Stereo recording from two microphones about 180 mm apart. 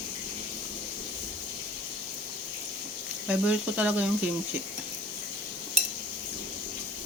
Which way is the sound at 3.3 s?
5° right (ahead or behind).